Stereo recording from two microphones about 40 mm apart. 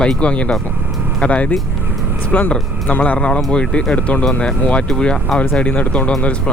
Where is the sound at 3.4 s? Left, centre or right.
Left.